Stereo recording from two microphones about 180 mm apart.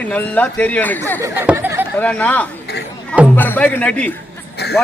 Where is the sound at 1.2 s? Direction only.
10° right (ahead or behind).